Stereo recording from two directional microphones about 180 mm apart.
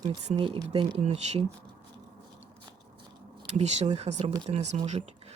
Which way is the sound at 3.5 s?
40° right (ahead or behind).